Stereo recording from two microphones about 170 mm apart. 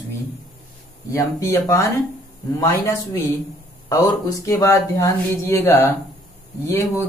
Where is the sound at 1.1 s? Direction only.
20° left (ahead or behind).